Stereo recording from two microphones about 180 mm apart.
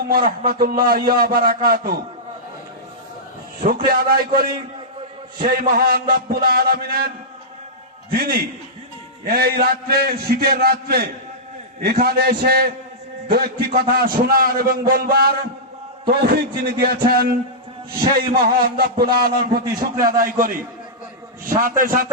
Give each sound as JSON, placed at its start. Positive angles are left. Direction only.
{"t": 0.3, "sound": "a man's voice", "side_deg": -55}
{"t": 3.8, "sound": "a man's voice", "side_deg": -55}
{"t": 8.1, "sound": "a man's voice", "side_deg": -55}
{"t": 18.4, "sound": "a man's voice", "side_deg": -60}